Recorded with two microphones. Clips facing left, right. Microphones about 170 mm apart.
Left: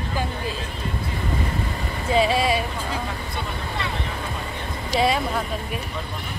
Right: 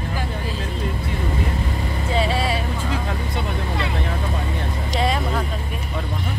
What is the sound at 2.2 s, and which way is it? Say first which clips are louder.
Vehicle: left 2 dB; 15° left (ahead or behind).